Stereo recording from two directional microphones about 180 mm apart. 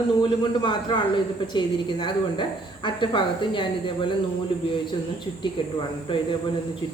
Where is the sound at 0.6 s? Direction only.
25° left (ahead or behind).